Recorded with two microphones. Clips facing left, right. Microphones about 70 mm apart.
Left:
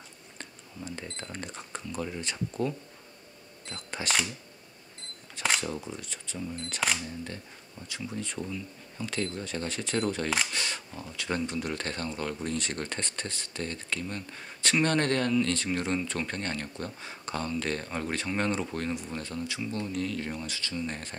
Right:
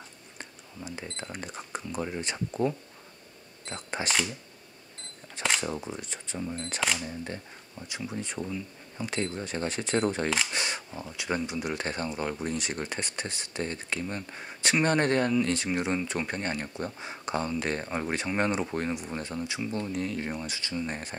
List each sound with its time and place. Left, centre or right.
0.4 s speech: centre
5.6 s speech: right
6.8 s speech: centre
7.9 s speech: centre